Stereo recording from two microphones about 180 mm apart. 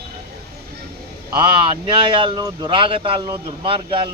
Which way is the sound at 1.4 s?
25° right (ahead or behind).